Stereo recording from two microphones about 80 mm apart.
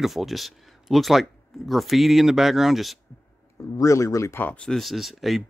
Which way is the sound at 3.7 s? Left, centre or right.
Left.